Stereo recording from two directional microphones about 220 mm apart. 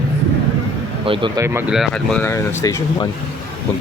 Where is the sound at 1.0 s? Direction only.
25° right (ahead or behind).